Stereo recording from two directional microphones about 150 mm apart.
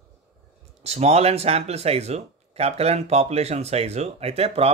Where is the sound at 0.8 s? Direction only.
45° right (ahead or behind).